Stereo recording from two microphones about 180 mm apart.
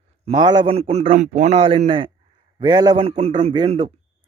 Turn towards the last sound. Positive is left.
turn(degrees=-30)  # may be behind; listen again after turning